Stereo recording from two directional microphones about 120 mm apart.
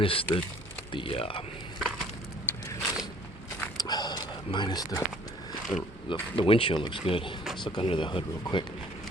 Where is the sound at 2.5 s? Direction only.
15° left (ahead or behind).